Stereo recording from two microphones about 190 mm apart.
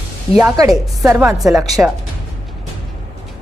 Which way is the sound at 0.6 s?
15° right (ahead or behind).